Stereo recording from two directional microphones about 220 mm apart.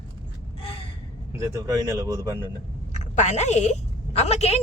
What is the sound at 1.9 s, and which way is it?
Speech, 10° right (ahead or behind).